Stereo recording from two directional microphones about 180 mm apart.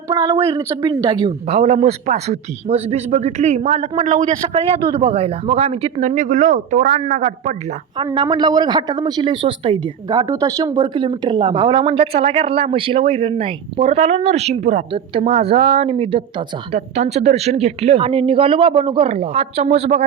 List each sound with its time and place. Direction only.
0.1 s a woman's voice: 20° right (ahead or behind)
1.5 s a man's voice: 35° right (ahead or behind)
7.9 s a woman's voice: 25° right (ahead or behind)